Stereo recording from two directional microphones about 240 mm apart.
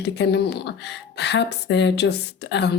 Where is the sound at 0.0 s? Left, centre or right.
Left.